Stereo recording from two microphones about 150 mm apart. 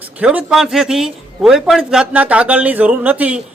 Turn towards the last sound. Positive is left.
turn(degrees=-10)  # may be behind; listen again after turning